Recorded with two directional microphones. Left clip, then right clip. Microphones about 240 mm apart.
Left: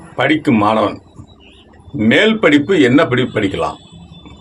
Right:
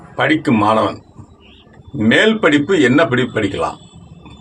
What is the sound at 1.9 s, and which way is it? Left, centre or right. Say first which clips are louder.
A man's voice: left 1 dB; centre.